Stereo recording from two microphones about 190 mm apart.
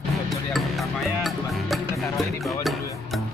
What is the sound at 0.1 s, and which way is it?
Music, centre (ahead or behind).